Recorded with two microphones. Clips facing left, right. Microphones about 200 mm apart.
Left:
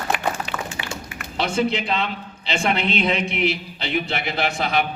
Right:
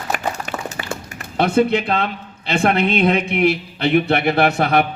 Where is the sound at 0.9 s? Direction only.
50° right (ahead or behind).